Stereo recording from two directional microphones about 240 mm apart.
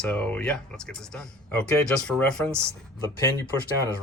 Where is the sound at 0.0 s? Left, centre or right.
Centre.